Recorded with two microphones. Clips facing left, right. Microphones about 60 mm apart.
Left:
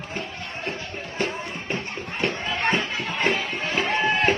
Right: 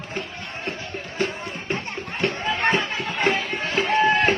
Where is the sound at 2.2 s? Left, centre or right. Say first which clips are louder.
Right 2 dB; centre.